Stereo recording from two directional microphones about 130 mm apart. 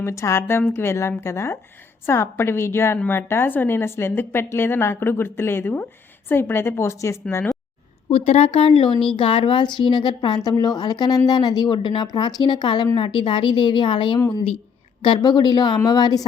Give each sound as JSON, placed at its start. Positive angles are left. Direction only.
{"t": 0.0, "sound": "a woman's voice", "side_deg": 20}
{"t": 8.1, "sound": "a woman's voice", "side_deg": 50}
{"t": 14.2, "sound": "a woman's voice", "side_deg": 25}